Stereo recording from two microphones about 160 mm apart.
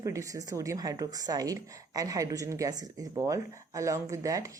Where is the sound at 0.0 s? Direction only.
20° right (ahead or behind).